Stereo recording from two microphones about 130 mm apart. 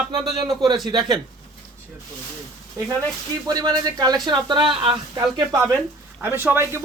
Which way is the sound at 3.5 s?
30° right (ahead or behind).